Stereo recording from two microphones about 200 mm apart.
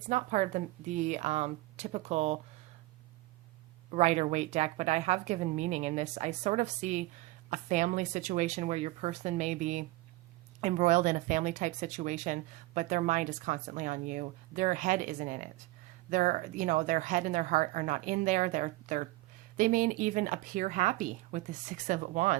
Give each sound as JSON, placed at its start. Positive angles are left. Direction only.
{"t": 0.1, "sound": "speech", "side_deg": -40}
{"t": 3.9, "sound": "speech", "side_deg": -35}